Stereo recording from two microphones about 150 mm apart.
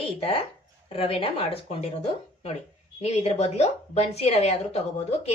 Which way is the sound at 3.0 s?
45° left (ahead or behind).